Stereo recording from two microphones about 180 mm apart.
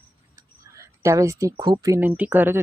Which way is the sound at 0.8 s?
15° right (ahead or behind).